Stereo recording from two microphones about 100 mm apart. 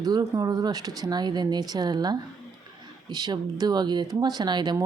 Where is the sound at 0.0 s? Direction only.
40° right (ahead or behind).